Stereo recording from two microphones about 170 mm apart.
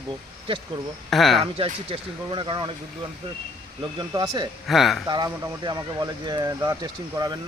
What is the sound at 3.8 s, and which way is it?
Speech, 25° right (ahead or behind).